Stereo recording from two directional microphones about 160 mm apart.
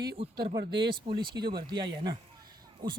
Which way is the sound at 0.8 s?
30° right (ahead or behind).